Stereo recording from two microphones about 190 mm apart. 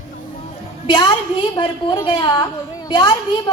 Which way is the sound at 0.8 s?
25° left (ahead or behind).